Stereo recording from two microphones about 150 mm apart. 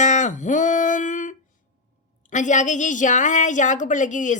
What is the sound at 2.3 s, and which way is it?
A woman's voice, 55° left (ahead or behind).